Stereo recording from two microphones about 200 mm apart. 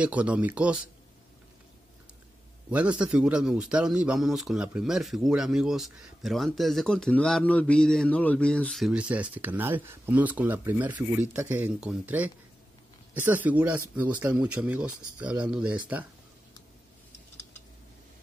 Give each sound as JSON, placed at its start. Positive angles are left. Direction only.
{"t": 0.0, "sound": "speech", "side_deg": -5}
{"t": 2.7, "sound": "speech", "side_deg": -5}